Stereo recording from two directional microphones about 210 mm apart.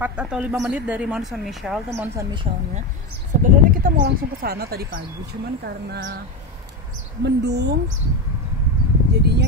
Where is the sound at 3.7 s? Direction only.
45° right (ahead or behind).